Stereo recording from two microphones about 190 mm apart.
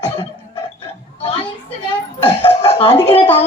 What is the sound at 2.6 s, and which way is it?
Speech, 30° left (ahead or behind).